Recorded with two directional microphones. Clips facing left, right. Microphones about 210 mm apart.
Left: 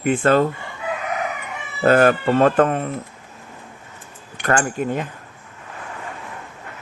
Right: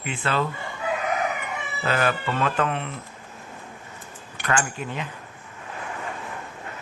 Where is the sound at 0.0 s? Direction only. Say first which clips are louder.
Left 10 dB; 50° left (ahead or behind).